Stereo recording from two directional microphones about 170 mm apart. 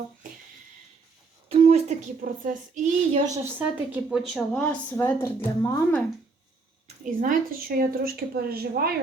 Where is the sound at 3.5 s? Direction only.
10° right (ahead or behind); by 5.3 s 10° left (ahead or behind).